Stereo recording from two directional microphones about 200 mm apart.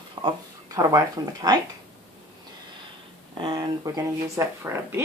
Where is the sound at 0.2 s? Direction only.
25° right (ahead or behind).